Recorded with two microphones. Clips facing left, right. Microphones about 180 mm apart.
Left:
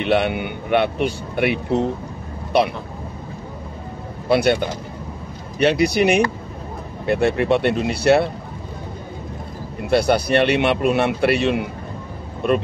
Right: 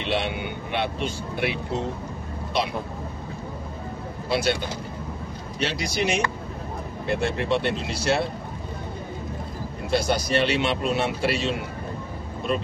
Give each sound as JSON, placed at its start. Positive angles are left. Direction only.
{"t": 0.0, "sound": "speech", "side_deg": 60}
{"t": 4.3, "sound": "speech", "side_deg": 60}
{"t": 9.8, "sound": "speech", "side_deg": 60}